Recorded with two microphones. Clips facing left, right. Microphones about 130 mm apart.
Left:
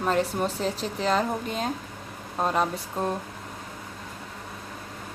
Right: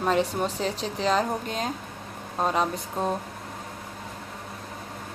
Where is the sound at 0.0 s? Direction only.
Centre (ahead or behind).